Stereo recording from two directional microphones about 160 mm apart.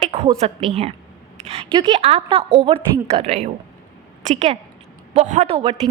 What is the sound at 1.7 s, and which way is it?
A woman's voice, 30° right (ahead or behind).